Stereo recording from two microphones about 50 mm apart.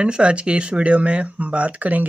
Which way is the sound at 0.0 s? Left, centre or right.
Right.